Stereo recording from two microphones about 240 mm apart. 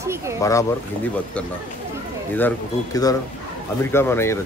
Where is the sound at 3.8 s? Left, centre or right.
Centre.